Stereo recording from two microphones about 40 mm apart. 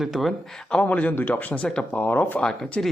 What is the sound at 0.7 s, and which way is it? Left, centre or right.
Speech, left.